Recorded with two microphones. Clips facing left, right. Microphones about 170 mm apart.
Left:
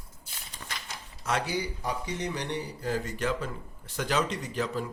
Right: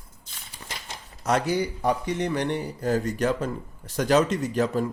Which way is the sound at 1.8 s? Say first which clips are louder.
Right 8 dB; 60° right (ahead or behind).